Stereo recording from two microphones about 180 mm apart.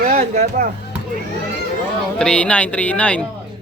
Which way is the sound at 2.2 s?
5° left (ahead or behind).